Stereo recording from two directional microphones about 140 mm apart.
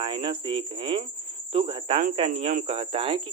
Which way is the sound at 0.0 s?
40° right (ahead or behind).